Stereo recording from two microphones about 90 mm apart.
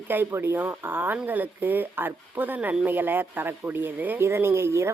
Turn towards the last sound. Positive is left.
turn(degrees=-30)  # may be behind; listen again after turning